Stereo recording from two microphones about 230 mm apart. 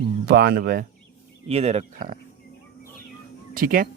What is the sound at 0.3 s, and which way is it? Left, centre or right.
Speech, right.